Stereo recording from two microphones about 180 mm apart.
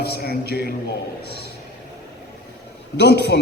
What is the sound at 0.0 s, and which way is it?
Speech, 60° left (ahead or behind).